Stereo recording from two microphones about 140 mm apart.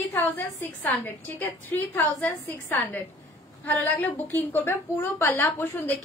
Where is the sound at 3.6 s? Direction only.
10° left (ahead or behind).